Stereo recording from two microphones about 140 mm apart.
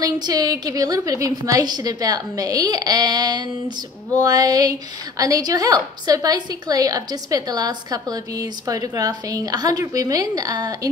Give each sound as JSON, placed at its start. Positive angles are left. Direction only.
{"t": 0.0, "sound": "a woman's voice", "side_deg": -25}